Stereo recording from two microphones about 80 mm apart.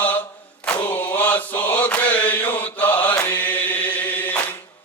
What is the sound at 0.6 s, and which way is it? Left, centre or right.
Chant, centre.